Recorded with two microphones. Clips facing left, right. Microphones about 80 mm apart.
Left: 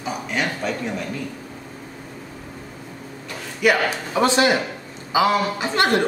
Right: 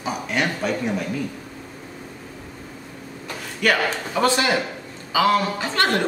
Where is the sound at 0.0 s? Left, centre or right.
Centre.